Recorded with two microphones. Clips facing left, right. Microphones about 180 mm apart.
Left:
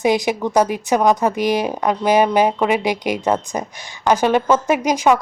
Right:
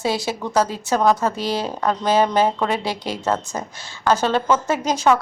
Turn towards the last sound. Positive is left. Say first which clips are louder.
# left 3 dB
turn(degrees=10)  # may be behind; listen again after turning